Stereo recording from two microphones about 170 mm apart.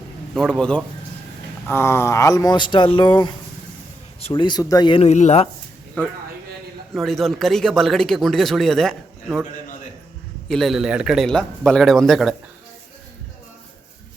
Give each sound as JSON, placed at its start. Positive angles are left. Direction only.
{"t": 0.3, "sound": "a man's voice", "side_deg": 5}
{"t": 5.0, "sound": "speech", "side_deg": 40}
{"t": 6.9, "sound": "a man's voice", "side_deg": 0}
{"t": 10.5, "sound": "a man's voice", "side_deg": 0}